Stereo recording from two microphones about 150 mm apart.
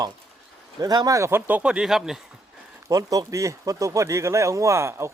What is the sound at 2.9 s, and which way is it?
Speech, 25° right (ahead or behind).